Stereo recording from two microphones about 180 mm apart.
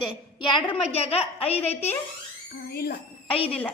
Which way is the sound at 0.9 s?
35° left (ahead or behind).